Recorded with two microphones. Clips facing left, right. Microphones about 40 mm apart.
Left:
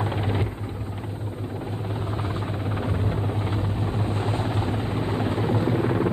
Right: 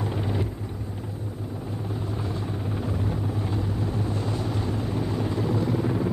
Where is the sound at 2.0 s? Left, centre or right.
Left.